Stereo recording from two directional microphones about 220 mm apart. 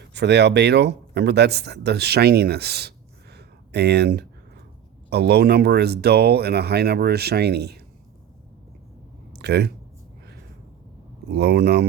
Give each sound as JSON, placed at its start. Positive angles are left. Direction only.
{"t": 0.0, "sound": "speech", "side_deg": -50}
{"t": 9.3, "sound": "speech", "side_deg": -50}
{"t": 11.3, "sound": "speech", "side_deg": -50}